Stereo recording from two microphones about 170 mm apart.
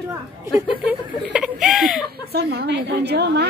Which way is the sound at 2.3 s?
75° right (ahead or behind).